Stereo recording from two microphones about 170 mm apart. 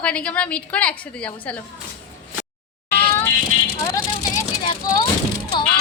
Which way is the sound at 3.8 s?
20° left (ahead or behind).